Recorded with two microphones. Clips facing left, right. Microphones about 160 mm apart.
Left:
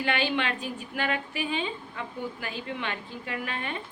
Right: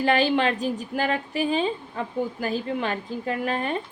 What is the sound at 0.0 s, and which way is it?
A woman's voice, 35° right (ahead or behind).